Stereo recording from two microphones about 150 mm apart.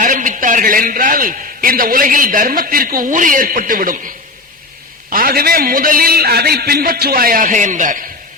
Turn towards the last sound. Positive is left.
turn(degrees=-60)  # may be behind; listen again after turning